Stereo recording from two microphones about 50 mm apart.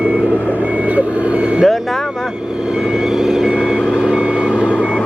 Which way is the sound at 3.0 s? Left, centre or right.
Centre.